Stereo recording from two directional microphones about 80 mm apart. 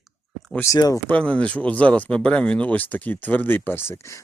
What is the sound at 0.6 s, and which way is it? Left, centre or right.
Speech, left.